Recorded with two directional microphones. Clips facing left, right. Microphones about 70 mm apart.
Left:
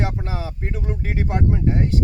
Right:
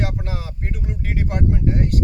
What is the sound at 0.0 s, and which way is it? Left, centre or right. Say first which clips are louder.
Speech: left 1 dB; left.